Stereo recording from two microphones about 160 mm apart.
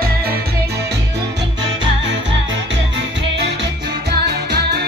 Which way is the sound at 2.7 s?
90° right.